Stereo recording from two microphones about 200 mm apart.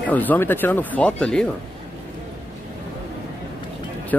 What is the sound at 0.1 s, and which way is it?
Speech, 10° left (ahead or behind).